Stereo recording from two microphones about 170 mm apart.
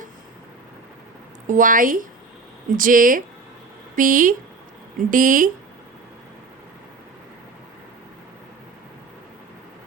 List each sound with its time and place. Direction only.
1.5 s a woman's voice: 50° right (ahead or behind)